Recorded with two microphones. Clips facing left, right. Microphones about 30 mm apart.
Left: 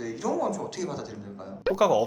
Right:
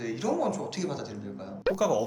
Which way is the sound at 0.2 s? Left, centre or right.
Right.